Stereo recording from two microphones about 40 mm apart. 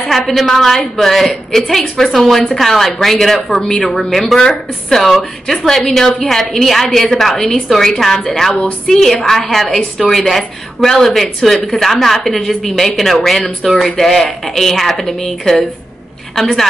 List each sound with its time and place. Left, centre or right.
0.1 s a woman's voice: centre
4.4 s a woman's voice: centre
5.1 s a woman's voice: centre